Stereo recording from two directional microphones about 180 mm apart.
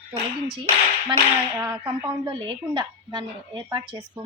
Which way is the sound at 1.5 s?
10° right (ahead or behind).